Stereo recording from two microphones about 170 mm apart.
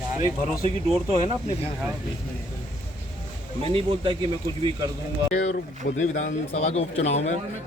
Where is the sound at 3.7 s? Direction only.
30° right (ahead or behind).